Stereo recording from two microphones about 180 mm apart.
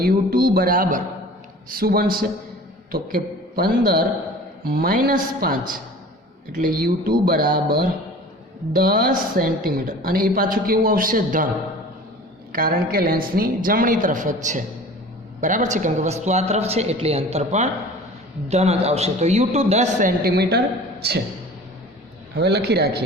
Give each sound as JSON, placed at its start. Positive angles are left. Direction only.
{"t": 0.0, "sound": "a woman's voice", "side_deg": -55}
{"t": 12.5, "sound": "a woman's voice", "side_deg": -55}
{"t": 22.4, "sound": "a man's voice", "side_deg": -65}